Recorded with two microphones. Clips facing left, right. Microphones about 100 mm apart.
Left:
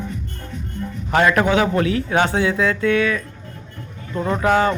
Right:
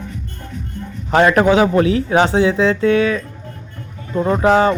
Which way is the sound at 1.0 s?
25° right (ahead or behind).